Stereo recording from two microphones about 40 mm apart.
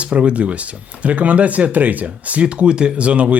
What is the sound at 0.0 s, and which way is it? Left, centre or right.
Speech, right.